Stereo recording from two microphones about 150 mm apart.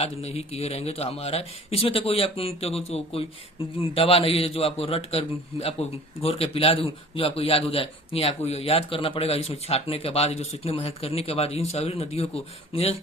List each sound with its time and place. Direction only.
0.0 s speech: 45° left (ahead or behind)